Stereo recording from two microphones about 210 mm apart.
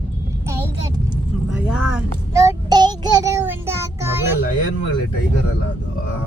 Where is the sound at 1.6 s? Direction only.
5° right (ahead or behind).